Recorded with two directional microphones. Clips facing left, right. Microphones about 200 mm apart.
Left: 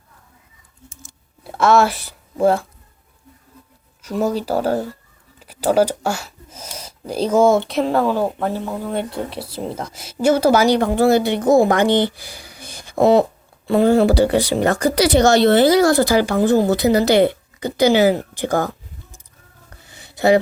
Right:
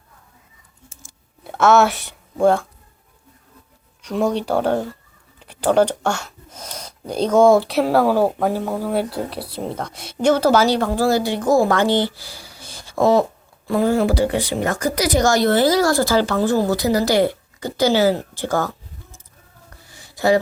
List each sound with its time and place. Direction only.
1.5 s speech: centre (ahead or behind)
4.0 s speech: 5° left (ahead or behind)
19.9 s a sound: 20° left (ahead or behind)